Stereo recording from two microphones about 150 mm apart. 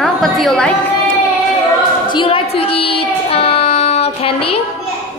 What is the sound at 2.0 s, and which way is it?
Child singing, 35° left (ahead or behind).